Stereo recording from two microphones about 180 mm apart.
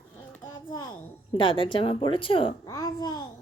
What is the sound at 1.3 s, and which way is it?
Speech, 30° left (ahead or behind).